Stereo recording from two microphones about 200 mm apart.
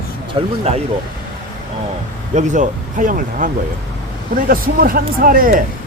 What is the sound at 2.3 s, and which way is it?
Speech, 35° right (ahead or behind).